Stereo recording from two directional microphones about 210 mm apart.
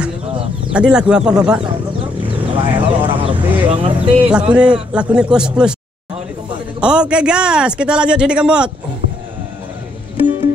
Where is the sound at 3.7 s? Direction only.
30° right (ahead or behind).